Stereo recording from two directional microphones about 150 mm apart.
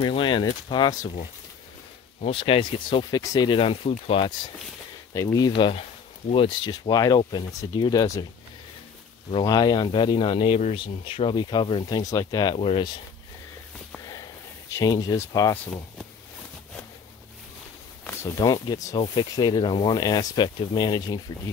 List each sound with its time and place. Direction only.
0.0 s speech: 35° left (ahead or behind)
2.2 s speech: 35° left (ahead or behind)
5.1 s speech: 25° left (ahead or behind)
9.3 s speech: 25° left (ahead or behind)
12.5 s speech: 40° left (ahead or behind)
14.0 s a sound: 25° left (ahead or behind)
18.4 s speech: 25° left (ahead or behind)